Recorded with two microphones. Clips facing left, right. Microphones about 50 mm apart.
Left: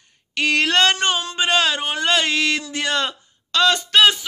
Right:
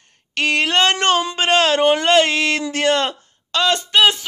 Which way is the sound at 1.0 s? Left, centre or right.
Right.